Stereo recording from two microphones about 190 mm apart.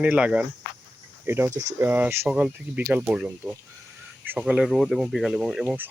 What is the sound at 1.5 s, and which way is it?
Speech, 40° right (ahead or behind).